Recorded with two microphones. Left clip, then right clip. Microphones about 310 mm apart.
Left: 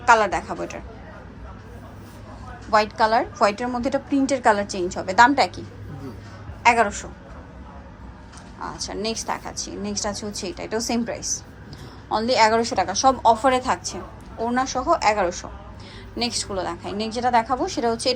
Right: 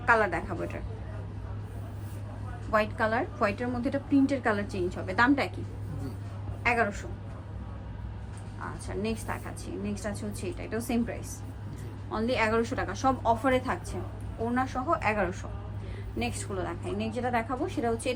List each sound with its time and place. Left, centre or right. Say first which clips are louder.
0.0 s a woman's voice: left 8 dB; centre
2.7 s a woman's voice: left 9 dB; centre
6.6 s a woman's voice: left 9 dB; centre
8.6 s a woman's voice: left 7 dB; centre